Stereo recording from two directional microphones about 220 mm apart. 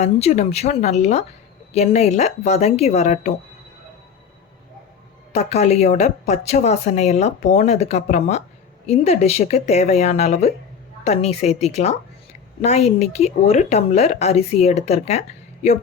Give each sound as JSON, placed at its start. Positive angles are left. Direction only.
{"t": 0.0, "sound": "speech", "side_deg": 30}
{"t": 5.3, "sound": "a woman's voice", "side_deg": 30}